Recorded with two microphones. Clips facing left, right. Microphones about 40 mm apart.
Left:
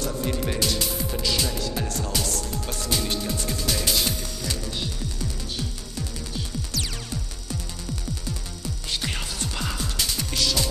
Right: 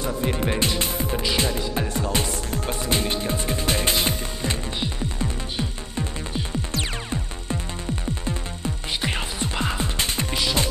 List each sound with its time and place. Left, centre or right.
0.0 s speech: right
2.2 s music: right
10.3 s music: right